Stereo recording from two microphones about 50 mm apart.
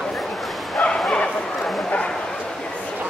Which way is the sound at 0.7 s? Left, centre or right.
Centre.